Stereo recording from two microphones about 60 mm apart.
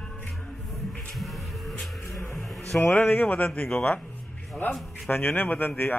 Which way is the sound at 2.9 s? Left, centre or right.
Left.